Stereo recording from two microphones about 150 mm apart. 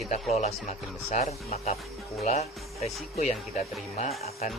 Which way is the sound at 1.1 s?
45° left (ahead or behind).